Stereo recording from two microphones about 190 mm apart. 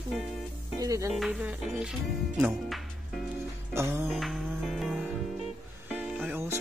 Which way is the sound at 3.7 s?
15° right (ahead or behind).